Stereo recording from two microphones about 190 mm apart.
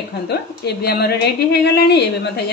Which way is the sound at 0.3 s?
60° left (ahead or behind).